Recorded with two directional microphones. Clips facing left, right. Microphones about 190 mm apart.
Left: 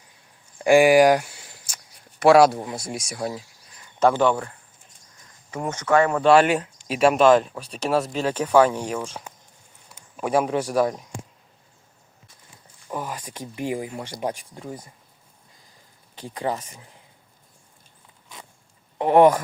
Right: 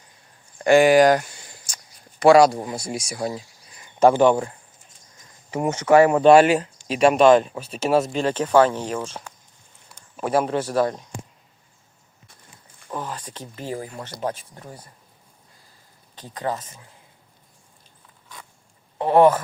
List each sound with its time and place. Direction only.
0.6 s speech: 10° left (ahead or behind)
3.8 s a sound: 15° right (ahead or behind)
5.5 s speech: 20° right (ahead or behind)
6.4 s speech: centre (ahead or behind)
9.9 s a sound: 5° left (ahead or behind)
10.3 s speech: centre (ahead or behind)
12.9 s speech: 10° left (ahead or behind)
16.1 s speech: 10° left (ahead or behind)
18.9 s speech: 15° left (ahead or behind)